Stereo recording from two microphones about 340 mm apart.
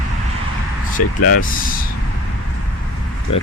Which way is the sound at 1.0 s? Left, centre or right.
Left.